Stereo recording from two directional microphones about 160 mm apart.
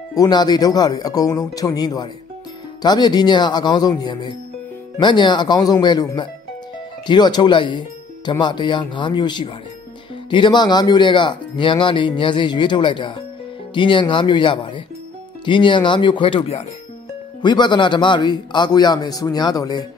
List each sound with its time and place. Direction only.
0.1 s speech: 25° left (ahead or behind)